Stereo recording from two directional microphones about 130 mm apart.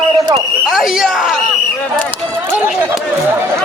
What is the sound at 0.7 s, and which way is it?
Speech, 5° right (ahead or behind).